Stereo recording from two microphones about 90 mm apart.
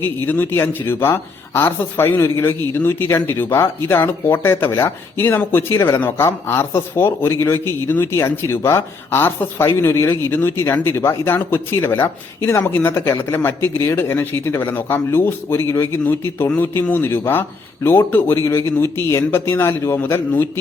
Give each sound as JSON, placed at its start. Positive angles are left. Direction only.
{"t": 0.3, "sound": "speech", "side_deg": 25}